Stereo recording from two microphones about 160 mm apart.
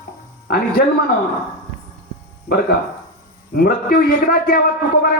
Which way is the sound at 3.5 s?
70° left (ahead or behind).